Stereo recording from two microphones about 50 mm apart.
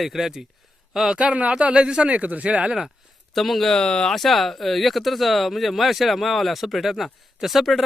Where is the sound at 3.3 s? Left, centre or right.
Centre.